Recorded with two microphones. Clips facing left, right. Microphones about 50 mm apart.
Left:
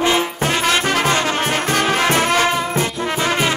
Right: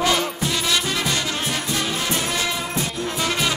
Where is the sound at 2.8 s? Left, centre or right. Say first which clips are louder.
Left 5 dB; left.